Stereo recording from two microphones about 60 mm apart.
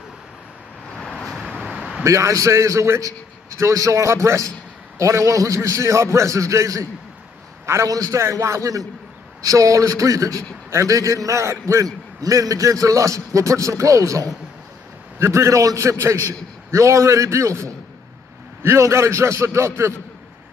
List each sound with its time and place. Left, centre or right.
1.1 s vehicle: centre
1.7 s a sound: centre
2.0 s a man's voice: right
7.9 s a man's voice: right
8.2 s a man's voice: right
15.1 s a man's voice: right
18.6 s a man's voice: right